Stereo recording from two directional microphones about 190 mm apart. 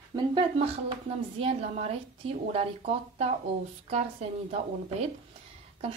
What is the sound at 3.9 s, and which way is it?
Speech, 35° right (ahead or behind).